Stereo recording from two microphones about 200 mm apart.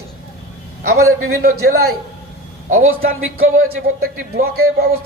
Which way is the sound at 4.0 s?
50° right (ahead or behind).